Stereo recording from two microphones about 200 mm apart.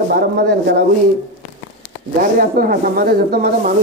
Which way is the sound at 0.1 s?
55° right (ahead or behind).